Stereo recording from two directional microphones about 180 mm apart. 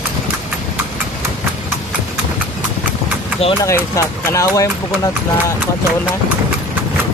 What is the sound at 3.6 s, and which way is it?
Speech, 15° left (ahead or behind).